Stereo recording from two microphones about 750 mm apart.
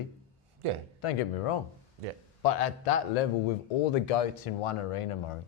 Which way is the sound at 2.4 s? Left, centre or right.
Left.